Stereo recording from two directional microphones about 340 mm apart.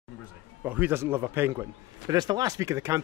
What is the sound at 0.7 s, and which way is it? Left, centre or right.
A man's voice, centre.